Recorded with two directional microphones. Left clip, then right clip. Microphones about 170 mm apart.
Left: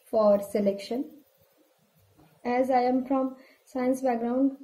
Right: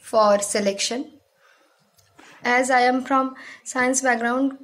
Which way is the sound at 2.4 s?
45° right (ahead or behind).